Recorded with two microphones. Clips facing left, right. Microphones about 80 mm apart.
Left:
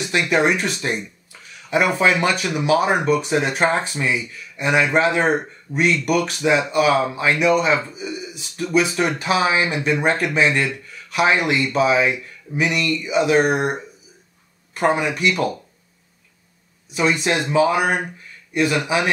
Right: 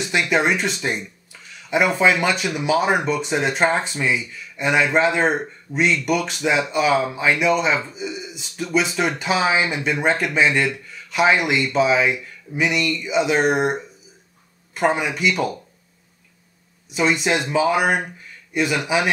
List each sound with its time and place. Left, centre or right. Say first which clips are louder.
0.0 s speech: left 1 dB; centre
5.7 s speech: even; centre
6.0 s speech: left 2 dB; centre
16.9 s speech: even; centre